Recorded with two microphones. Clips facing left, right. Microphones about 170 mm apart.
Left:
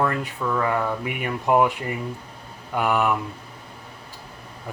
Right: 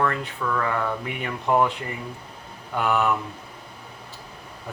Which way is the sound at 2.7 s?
10° left (ahead or behind).